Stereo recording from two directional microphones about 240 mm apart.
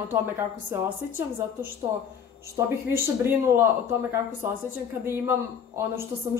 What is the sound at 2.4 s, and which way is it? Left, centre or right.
Speech, centre.